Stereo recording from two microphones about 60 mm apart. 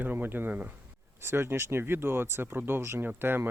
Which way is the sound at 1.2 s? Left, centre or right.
Right.